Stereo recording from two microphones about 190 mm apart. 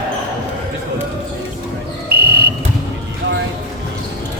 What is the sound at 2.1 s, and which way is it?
Fire alarm, 55° right (ahead or behind).